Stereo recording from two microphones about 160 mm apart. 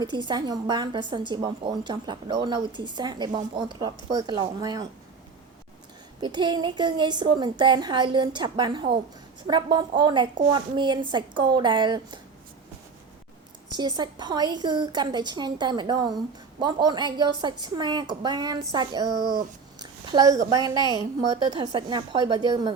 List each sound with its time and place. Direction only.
0.0 s a woman's voice: 30° right (ahead or behind)
6.2 s a woman's voice: 30° right (ahead or behind)
13.7 s a woman's voice: 25° right (ahead or behind)